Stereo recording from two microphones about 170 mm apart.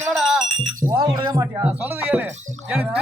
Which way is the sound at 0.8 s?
20° right (ahead or behind).